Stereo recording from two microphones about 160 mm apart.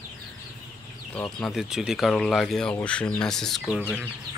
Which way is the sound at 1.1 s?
10° left (ahead or behind).